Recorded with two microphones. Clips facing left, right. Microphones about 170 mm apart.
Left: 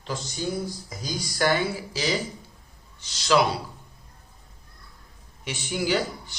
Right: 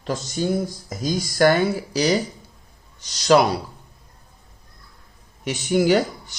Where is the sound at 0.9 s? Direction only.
45° right (ahead or behind).